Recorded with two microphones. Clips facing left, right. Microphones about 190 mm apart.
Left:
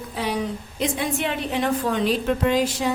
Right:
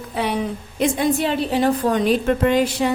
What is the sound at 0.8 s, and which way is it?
A woman's voice, 35° right (ahead or behind).